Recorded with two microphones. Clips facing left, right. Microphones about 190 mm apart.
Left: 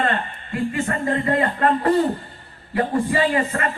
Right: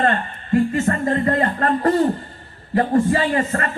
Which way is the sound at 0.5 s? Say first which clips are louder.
Right 6 dB; 40° right (ahead or behind).